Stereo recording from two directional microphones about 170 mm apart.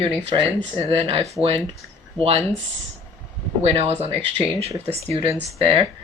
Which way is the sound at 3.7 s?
35° right (ahead or behind).